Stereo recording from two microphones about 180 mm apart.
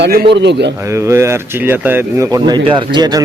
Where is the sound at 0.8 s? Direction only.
15° right (ahead or behind).